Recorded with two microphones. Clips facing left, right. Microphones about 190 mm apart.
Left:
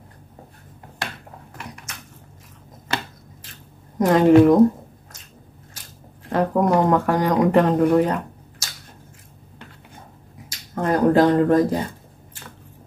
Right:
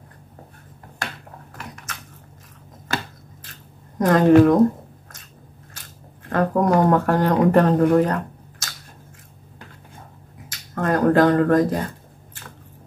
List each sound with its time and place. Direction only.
4.0 s speech: 15° left (ahead or behind)
6.2 s speech: 15° left (ahead or behind)
10.7 s speech: 15° left (ahead or behind)